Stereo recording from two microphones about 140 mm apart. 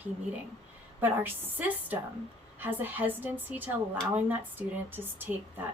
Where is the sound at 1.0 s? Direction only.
10° right (ahead or behind).